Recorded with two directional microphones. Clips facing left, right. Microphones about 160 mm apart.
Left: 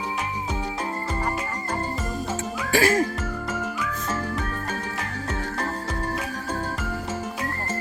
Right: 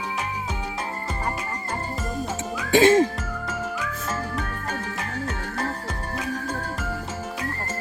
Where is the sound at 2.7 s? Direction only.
25° right (ahead or behind).